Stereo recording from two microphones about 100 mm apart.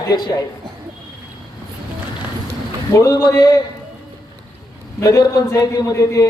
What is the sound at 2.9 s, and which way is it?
Speech, 35° left (ahead or behind).